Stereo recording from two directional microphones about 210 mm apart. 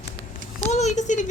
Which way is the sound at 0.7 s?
35° left (ahead or behind).